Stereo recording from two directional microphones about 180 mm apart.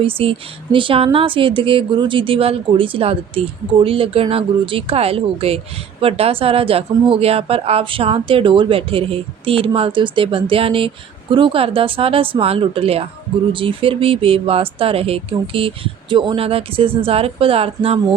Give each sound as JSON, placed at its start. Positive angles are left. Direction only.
{"t": 0.0, "sound": "speech", "side_deg": -30}